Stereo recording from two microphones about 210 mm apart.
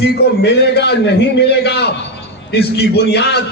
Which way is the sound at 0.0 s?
55° left (ahead or behind).